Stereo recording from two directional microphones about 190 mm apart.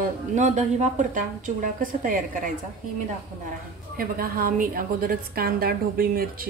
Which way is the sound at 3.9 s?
50° right (ahead or behind).